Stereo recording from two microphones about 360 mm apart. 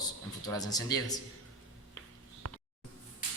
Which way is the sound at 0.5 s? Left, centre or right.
Centre.